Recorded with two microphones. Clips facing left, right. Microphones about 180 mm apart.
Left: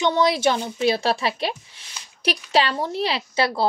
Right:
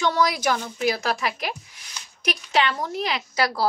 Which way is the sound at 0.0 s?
25° left (ahead or behind).